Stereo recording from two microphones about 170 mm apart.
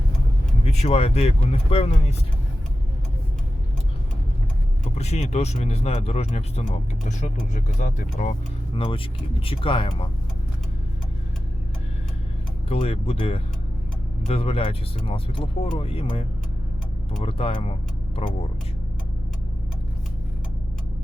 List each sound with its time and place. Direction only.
0.6 s speech: 40° left (ahead or behind)
4.9 s speech: 40° left (ahead or behind)
12.6 s speech: 35° left (ahead or behind)
17.2 s speech: 35° left (ahead or behind)